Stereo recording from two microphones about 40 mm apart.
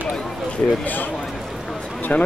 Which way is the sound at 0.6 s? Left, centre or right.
Left.